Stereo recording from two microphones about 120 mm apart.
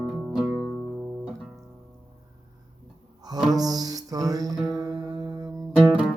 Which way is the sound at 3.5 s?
30° right (ahead or behind).